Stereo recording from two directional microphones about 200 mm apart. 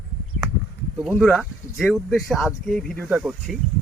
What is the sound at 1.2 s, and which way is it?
Speech, centre (ahead or behind).